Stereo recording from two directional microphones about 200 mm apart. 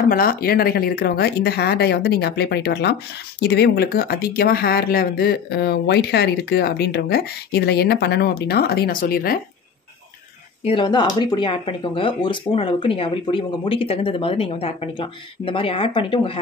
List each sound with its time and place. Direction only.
0.1 s speech: 50° left (ahead or behind)
10.6 s speech: 25° left (ahead or behind)